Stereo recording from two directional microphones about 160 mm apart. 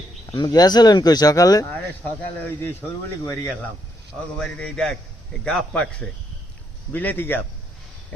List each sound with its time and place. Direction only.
0.3 s speech: 25° left (ahead or behind)
2.4 s a man's voice: 10° left (ahead or behind)
4.4 s a man's voice: 5° left (ahead or behind)